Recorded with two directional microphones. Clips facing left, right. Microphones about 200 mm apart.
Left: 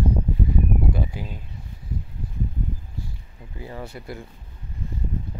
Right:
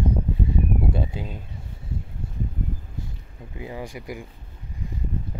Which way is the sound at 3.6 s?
15° right (ahead or behind).